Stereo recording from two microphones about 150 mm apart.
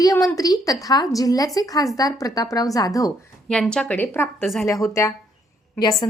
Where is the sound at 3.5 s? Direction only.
5° left (ahead or behind).